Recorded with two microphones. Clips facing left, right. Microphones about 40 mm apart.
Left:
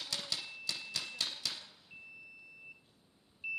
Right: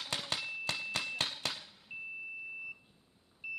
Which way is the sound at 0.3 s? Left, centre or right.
Right.